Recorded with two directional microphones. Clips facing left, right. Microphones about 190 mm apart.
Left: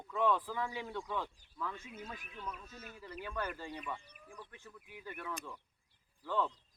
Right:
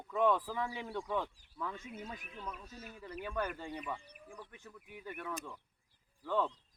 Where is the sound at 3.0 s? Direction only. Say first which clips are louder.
Right 3 dB; 15° right (ahead or behind).